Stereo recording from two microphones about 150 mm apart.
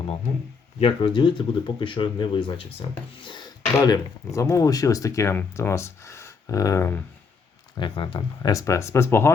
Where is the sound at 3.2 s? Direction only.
30° left (ahead or behind).